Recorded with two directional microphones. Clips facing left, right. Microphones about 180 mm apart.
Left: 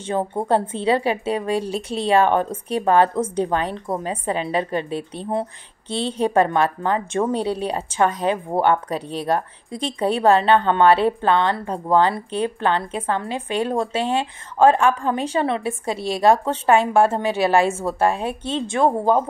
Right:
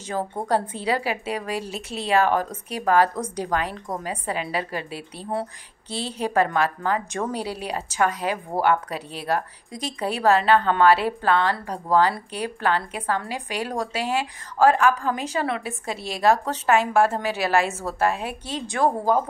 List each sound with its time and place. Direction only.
0.1 s a woman's voice: 25° left (ahead or behind)